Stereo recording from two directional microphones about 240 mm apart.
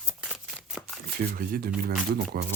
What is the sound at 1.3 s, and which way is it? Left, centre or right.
Speech, right.